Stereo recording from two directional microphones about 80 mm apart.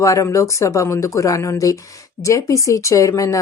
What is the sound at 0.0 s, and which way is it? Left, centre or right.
A woman's voice, left.